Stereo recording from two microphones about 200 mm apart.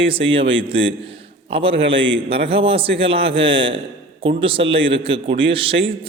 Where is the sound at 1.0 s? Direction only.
25° right (ahead or behind).